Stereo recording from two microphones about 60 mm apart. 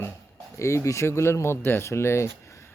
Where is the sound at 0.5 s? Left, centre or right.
Left.